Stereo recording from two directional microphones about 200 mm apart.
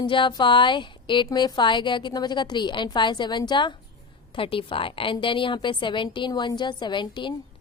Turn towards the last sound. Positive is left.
turn(degrees=25)  # may be behind; listen again after turning